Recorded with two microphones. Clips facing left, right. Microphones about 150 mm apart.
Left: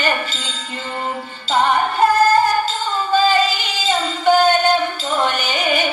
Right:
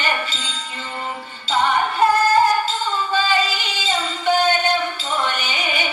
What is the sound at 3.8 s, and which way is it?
Music, 45° left (ahead or behind).